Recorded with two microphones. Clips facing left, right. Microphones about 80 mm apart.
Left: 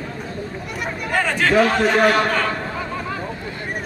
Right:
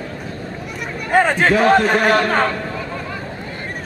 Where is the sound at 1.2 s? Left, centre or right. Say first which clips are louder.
Right 2 dB; right.